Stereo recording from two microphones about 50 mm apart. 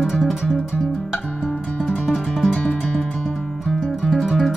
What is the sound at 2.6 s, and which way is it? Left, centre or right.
Music, left.